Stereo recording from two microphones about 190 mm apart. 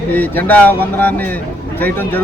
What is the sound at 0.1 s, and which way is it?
Speech, 10° left (ahead or behind).